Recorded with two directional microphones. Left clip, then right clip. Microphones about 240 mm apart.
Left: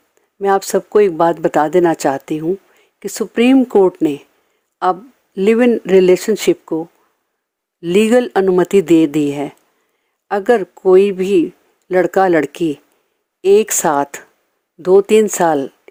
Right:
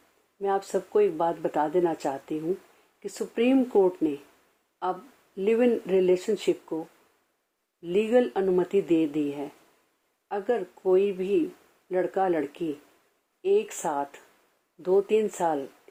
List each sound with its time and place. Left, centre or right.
0.3 s speech: left